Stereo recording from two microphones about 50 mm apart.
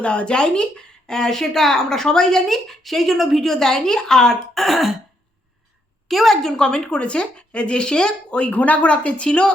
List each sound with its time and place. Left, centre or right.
0.0 s a woman's voice: left
4.6 s throat clearing: centre
6.1 s a woman's voice: centre; by 9.5 s left